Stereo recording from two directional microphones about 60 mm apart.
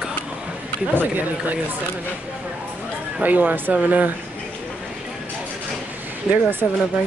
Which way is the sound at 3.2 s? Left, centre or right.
Right.